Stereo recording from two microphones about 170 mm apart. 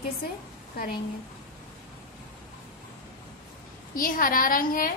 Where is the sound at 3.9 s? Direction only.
55° left (ahead or behind).